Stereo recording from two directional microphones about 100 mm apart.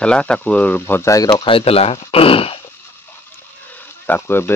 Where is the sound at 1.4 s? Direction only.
70° left (ahead or behind).